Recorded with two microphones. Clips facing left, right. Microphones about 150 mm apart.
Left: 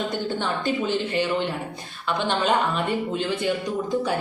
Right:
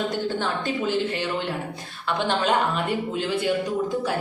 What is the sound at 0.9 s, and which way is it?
A woman's voice, centre (ahead or behind).